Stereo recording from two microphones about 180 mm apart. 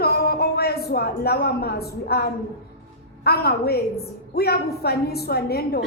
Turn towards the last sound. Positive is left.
turn(degrees=60)  # may be behind; listen again after turning